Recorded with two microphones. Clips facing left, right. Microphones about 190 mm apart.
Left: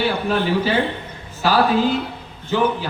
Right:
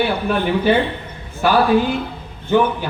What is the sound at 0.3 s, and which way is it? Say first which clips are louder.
A man's voice: right 4 dB; 55° right (ahead or behind).